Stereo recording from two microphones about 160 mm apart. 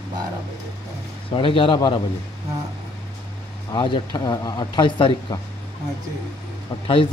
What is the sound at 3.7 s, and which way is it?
Speech, 30° left (ahead or behind).